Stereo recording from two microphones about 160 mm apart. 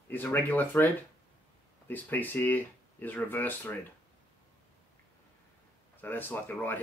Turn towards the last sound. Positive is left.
turn(degrees=10)  # may be behind; listen again after turning